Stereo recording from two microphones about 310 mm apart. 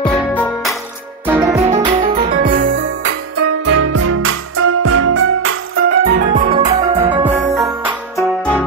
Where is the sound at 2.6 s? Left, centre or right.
Right.